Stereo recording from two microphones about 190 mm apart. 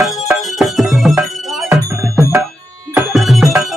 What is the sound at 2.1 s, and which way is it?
Music, 15° right (ahead or behind).